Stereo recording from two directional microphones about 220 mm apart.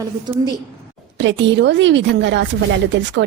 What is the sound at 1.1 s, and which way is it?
A woman's voice, 55° right (ahead or behind).